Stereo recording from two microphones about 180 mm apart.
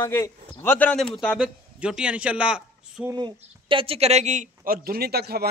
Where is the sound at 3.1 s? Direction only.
25° right (ahead or behind).